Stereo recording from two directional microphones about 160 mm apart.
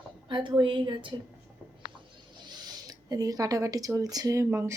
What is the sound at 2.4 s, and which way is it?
Speech, 25° right (ahead or behind).